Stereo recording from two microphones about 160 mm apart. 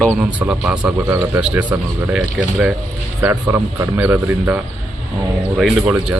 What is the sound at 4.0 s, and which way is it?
Speech, 10° right (ahead or behind).